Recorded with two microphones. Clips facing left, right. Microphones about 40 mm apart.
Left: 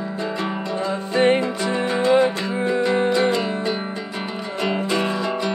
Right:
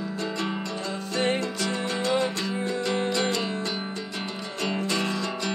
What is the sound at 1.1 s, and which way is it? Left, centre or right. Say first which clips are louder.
Music: left 8 dB; left.